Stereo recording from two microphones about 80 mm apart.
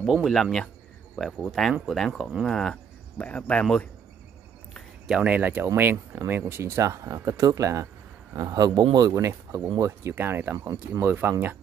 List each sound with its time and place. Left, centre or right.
0.0 s speech: centre
5.0 s speech: centre
5.3 s speech: right
8.4 s speech: right
9.1 s speech: right